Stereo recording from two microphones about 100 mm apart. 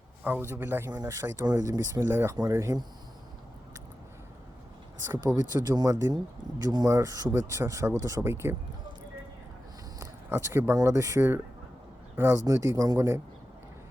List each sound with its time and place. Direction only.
0.3 s speech: 20° right (ahead or behind)
0.9 s speech: 35° right (ahead or behind)
2.0 s speech: 25° right (ahead or behind)
5.4 s speech: 40° right (ahead or behind)
7.3 s speech: 25° right (ahead or behind)
10.0 s a sound: 25° right (ahead or behind)
10.8 s speech: 30° right (ahead or behind)